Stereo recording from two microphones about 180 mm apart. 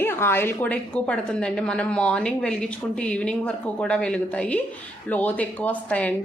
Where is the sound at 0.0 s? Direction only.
15° left (ahead or behind).